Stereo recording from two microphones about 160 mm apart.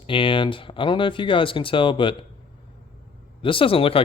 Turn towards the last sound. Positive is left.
turn(degrees=35)  # may be behind; listen again after turning